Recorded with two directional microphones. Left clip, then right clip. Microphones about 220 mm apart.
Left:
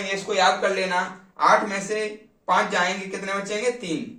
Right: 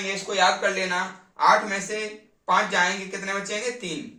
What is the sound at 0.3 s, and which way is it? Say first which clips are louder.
Speech: left 1 dB; 20° right (ahead or behind).